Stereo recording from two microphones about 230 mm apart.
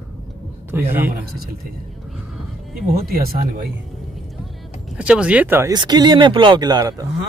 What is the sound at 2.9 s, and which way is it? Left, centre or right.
Speech, right.